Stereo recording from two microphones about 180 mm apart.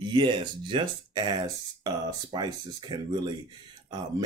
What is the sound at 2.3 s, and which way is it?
Speech, 25° right (ahead or behind).